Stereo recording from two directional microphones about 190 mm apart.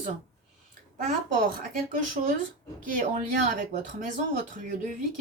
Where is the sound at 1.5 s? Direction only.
40° right (ahead or behind).